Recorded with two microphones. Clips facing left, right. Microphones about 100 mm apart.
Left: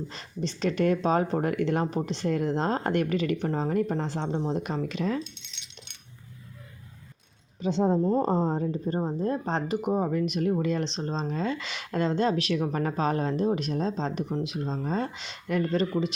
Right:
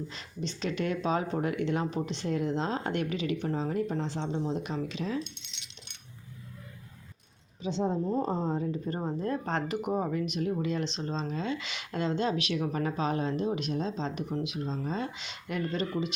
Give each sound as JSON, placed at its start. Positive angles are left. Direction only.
{"t": 0.1, "sound": "speech", "side_deg": 40}
{"t": 2.2, "sound": "speech", "side_deg": 50}
{"t": 7.6, "sound": "speech", "side_deg": 50}
{"t": 8.9, "sound": "speech", "side_deg": 20}
{"t": 10.3, "sound": "speech", "side_deg": 45}